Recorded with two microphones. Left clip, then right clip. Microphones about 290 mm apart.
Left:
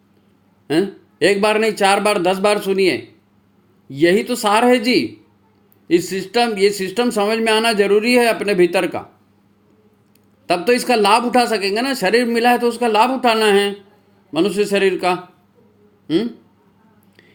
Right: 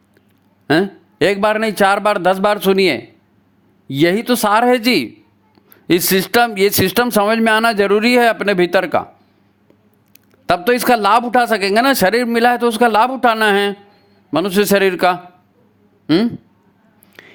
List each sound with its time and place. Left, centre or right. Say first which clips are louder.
0.7 s speech: right 3 dB; right
10.4 s speech: right 2 dB; right